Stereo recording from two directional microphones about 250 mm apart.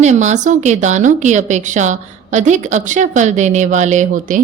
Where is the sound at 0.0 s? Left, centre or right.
Right.